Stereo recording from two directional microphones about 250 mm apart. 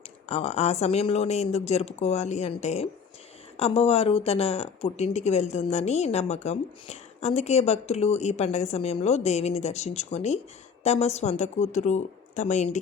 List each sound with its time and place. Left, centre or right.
0.3 s speech: left